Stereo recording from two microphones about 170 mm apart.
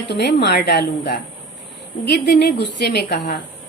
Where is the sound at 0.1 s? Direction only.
80° left.